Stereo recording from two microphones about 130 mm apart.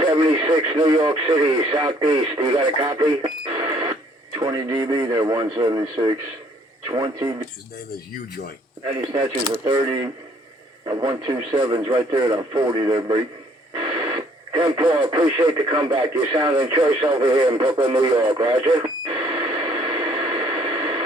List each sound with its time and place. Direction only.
0.0 s speech: 40° right (ahead or behind)
2.8 s speech: 25° right (ahead or behind)
3.2 s speech: 40° right (ahead or behind)
4.4 s speech: 30° right (ahead or behind)
8.8 s speech: 40° right (ahead or behind)
10.9 s speech: 25° right (ahead or behind)
11.5 s speech: 35° right (ahead or behind)
17.8 s radio: 35° right (ahead or behind)